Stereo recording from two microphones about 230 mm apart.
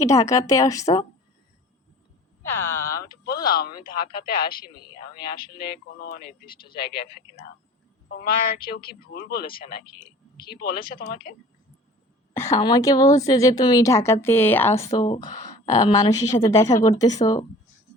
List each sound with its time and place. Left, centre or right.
0.0 s a woman's voice: centre
2.4 s a sound: centre
3.2 s speech: left
12.4 s a woman's voice: centre